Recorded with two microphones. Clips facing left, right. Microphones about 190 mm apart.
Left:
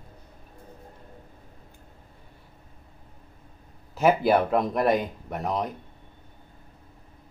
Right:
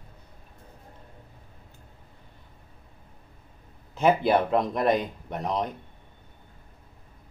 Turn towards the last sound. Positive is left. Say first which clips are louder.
# even
turn(degrees=5)  # may be behind; listen again after turning